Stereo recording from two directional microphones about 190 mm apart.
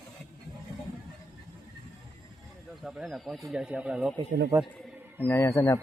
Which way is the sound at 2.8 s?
Centre (ahead or behind).